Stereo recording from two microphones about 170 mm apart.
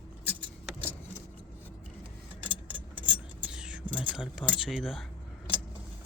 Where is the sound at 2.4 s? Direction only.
30° right (ahead or behind).